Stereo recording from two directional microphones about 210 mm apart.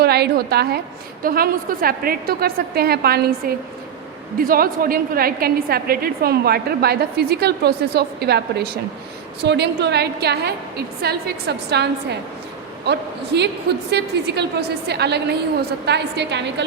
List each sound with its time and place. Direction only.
0.0 s a woman's voice: 50° right (ahead or behind)
4.4 s a woman's voice: 45° right (ahead or behind)